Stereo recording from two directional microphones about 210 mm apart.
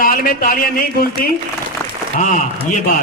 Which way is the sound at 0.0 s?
45° left (ahead or behind).